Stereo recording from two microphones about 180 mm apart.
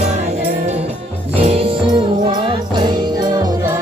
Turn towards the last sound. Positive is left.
turn(degrees=-20)  # may be behind; listen again after turning